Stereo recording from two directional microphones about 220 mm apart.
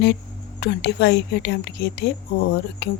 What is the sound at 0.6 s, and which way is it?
Speech, 50° left (ahead or behind).